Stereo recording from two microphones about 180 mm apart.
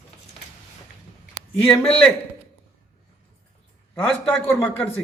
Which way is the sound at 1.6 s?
5° left (ahead or behind).